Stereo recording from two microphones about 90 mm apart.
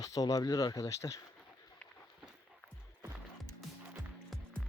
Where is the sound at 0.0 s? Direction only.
40° left (ahead or behind).